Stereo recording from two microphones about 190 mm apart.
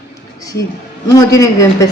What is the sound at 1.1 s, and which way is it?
Speech, 15° left (ahead or behind).